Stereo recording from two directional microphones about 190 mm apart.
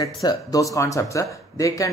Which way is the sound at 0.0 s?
20° left (ahead or behind).